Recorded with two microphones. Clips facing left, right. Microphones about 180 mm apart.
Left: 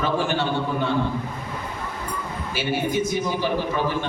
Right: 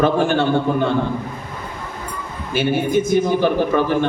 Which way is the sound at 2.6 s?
50° right (ahead or behind).